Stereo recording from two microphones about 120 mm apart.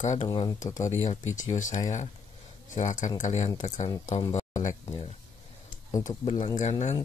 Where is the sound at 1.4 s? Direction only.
90° left.